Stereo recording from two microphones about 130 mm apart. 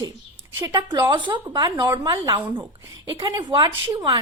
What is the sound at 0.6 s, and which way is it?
Speech, 30° right (ahead or behind).